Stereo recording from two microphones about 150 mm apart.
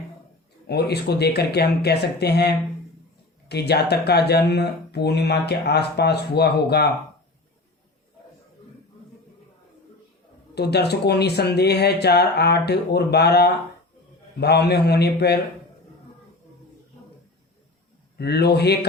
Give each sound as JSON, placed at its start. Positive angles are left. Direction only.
{"t": 0.7, "sound": "speech", "side_deg": 90}
{"t": 3.5, "sound": "speech", "side_deg": 90}
{"t": 10.5, "sound": "speech", "side_deg": 90}
{"t": 18.2, "sound": "speech", "side_deg": 90}